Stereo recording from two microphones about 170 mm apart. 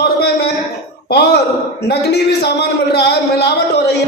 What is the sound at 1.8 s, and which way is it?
Speech, 75° left (ahead or behind).